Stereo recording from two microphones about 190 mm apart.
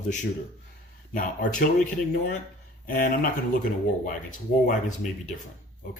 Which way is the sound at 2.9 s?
45° left (ahead or behind).